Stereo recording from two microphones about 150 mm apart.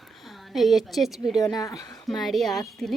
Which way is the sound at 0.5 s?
Centre (ahead or behind).